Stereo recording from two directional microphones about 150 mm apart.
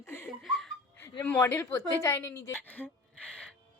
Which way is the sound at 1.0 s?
15° left (ahead or behind).